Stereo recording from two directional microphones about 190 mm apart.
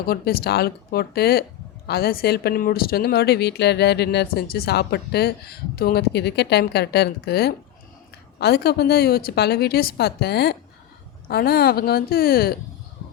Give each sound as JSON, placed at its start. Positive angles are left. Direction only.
{"t": 0.0, "sound": "a woman's voice", "side_deg": 55}